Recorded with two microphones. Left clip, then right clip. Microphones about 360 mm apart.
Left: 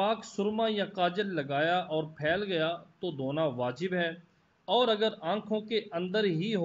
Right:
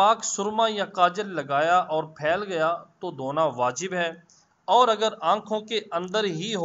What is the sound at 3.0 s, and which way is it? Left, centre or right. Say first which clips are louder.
Speech: right 4 dB; right.